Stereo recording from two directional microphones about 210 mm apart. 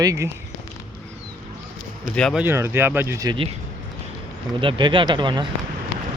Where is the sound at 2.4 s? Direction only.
10° right (ahead or behind).